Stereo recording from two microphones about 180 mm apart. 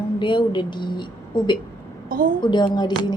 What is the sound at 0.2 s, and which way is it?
Speech, 25° left (ahead or behind).